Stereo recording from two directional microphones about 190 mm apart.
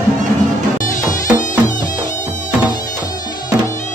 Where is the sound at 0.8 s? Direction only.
45° left (ahead or behind).